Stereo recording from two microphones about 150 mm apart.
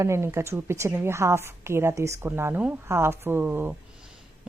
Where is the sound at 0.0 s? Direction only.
20° right (ahead or behind).